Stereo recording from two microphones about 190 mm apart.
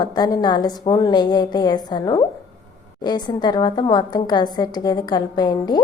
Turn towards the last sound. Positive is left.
turn(degrees=20)  # may be behind; listen again after turning